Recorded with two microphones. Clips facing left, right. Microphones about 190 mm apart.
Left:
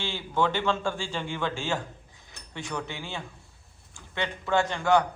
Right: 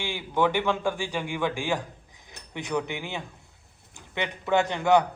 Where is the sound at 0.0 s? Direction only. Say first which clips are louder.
Right 2 dB; 15° right (ahead or behind).